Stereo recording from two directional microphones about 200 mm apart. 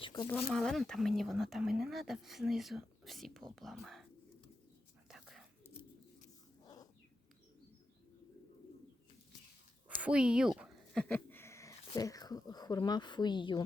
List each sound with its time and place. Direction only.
0.0 s speech: 20° left (ahead or behind)
0.3 s speech: 5° left (ahead or behind)
5.0 s whispering: centre (ahead or behind)
10.0 s speech: 5° right (ahead or behind); by 13.6 s 25° left (ahead or behind)